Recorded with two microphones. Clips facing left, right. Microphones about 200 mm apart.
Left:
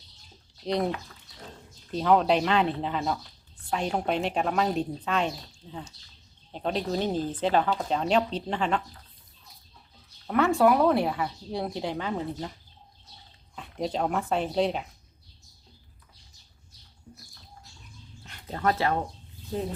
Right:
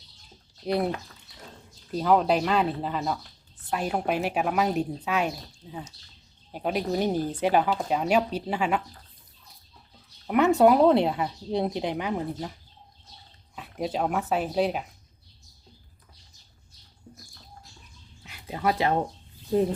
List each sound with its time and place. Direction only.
1.9 s speech: 5° right (ahead or behind)
10.2 s speech: 20° right (ahead or behind)
13.6 s speech: 5° right (ahead or behind)
18.2 s dog: 10° right (ahead or behind)